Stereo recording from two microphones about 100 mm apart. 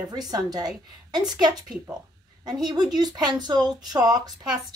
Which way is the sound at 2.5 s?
45° right (ahead or behind).